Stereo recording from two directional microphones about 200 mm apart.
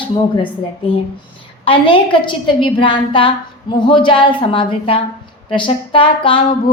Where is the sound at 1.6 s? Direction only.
25° left (ahead or behind).